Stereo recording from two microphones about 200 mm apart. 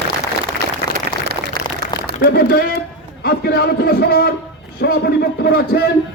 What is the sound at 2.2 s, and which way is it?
A man's voice, 50° left (ahead or behind).